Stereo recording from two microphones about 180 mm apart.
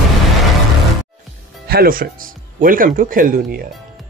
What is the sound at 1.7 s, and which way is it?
Speech, 55° right (ahead or behind).